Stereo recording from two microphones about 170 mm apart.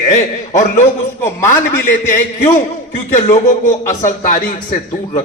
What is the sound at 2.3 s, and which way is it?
A man's voice, 45° left (ahead or behind).